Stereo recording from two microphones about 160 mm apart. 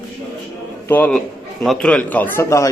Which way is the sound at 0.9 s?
10° left (ahead or behind).